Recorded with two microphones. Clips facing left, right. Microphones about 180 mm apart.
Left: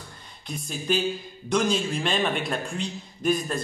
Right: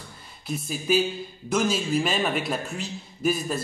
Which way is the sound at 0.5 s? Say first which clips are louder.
Right 3 dB; 5° right (ahead or behind).